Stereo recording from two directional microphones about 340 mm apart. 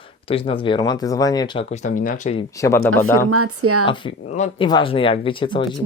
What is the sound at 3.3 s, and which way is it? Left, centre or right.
Speech, right.